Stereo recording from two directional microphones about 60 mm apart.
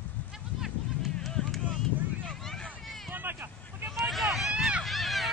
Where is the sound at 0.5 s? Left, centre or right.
Centre.